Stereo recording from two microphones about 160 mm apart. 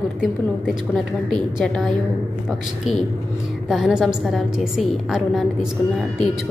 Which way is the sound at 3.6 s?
Centre (ahead or behind).